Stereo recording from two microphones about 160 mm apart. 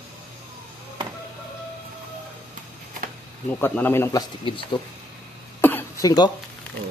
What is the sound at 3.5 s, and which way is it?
Speech, 10° left (ahead or behind).